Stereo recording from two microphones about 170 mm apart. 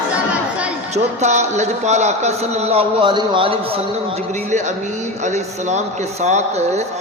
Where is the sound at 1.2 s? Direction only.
45° right (ahead or behind).